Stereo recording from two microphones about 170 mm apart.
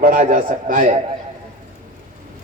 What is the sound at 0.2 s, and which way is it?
Speech, 50° right (ahead or behind).